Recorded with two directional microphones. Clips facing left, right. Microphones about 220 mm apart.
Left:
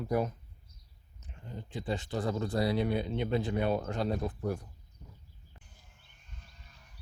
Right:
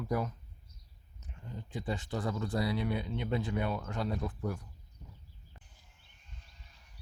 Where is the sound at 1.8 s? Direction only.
30° left (ahead or behind).